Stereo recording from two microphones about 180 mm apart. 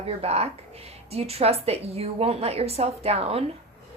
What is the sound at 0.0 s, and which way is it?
A woman's voice, 35° right (ahead or behind).